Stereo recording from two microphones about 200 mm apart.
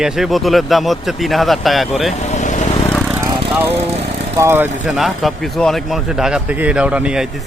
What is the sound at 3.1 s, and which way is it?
Vehicle, 15° right (ahead or behind).